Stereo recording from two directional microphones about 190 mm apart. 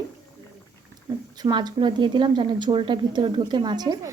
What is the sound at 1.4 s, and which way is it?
A woman's voice, 20° right (ahead or behind).